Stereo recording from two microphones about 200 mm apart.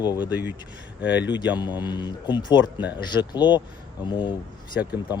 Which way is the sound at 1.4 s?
20° left (ahead or behind).